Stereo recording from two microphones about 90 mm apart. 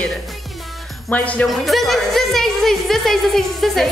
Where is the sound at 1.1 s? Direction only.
15° left (ahead or behind).